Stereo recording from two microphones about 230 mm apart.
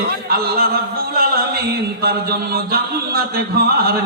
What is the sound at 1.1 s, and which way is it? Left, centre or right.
Chant, right.